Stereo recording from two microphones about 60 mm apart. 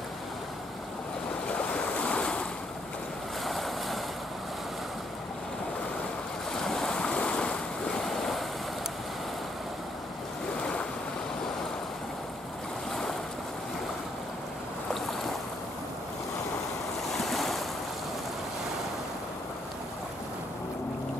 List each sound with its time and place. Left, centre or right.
1.5 s waves: centre
3.4 s waves: centre
6.5 s waves: centre
17.2 s waves: centre